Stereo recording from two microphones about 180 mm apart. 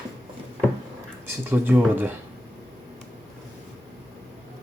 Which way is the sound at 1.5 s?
10° right (ahead or behind).